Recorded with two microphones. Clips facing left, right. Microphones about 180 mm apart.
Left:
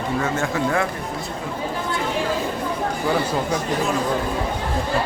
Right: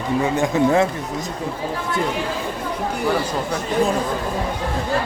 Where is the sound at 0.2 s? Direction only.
15° right (ahead or behind).